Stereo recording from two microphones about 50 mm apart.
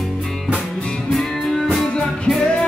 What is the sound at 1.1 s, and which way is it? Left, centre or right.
Music, centre.